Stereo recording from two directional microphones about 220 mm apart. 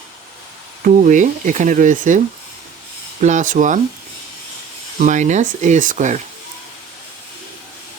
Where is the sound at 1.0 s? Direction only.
35° right (ahead or behind).